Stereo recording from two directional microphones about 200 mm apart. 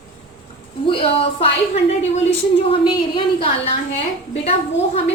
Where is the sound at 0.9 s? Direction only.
30° left (ahead or behind).